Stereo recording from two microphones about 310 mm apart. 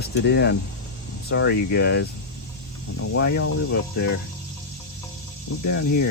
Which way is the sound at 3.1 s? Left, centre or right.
Left.